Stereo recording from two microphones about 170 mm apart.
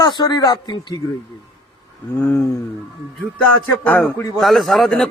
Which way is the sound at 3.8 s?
10° left (ahead or behind).